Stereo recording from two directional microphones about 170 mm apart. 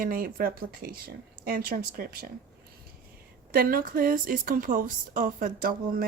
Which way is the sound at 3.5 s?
60° right (ahead or behind).